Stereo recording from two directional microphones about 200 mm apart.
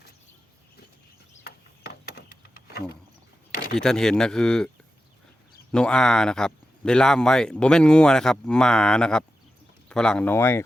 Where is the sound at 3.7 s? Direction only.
5° left (ahead or behind).